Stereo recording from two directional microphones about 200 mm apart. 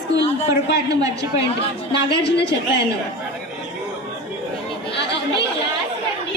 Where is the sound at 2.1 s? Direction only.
55° left (ahead or behind).